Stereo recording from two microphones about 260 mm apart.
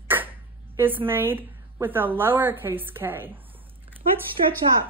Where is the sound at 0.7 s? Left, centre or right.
Centre.